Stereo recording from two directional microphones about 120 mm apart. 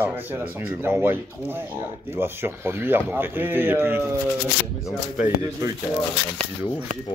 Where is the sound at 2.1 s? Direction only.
20° right (ahead or behind).